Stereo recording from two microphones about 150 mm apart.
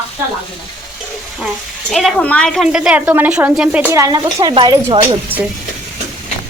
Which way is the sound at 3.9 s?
20° right (ahead or behind).